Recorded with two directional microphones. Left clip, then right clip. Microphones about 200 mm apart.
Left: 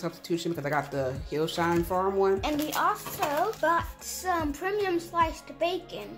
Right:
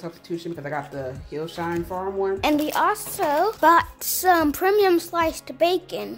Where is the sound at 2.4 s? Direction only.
50° right (ahead or behind).